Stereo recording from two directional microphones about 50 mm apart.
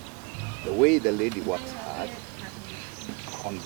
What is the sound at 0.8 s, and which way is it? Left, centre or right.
Speech, centre.